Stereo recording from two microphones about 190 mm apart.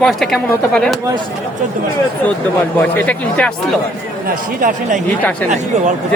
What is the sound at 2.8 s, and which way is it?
Speech, 5° left (ahead or behind).